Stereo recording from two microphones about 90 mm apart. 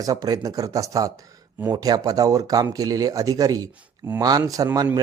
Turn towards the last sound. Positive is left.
turn(degrees=-40)  # may be behind; listen again after turning